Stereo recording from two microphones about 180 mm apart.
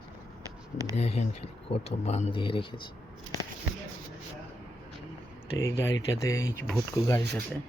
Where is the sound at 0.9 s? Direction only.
35° left (ahead or behind).